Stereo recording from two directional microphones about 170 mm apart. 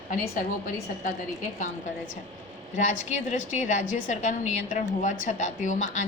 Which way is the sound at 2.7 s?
45° left (ahead or behind).